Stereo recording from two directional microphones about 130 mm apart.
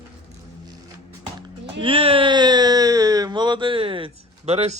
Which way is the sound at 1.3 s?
40° right (ahead or behind).